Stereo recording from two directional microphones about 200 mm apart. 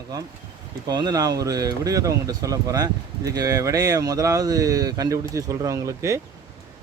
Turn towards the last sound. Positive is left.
turn(degrees=-15)  # may be behind; listen again after turning